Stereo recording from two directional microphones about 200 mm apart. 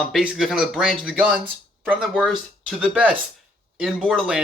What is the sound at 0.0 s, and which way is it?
Speech, centre (ahead or behind).